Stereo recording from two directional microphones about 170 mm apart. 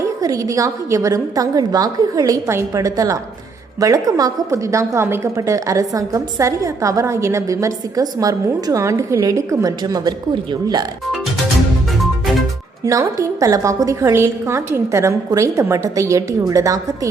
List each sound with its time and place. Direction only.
0.0 s a woman's voice: 20° right (ahead or behind)
12.8 s a woman's voice: 20° right (ahead or behind)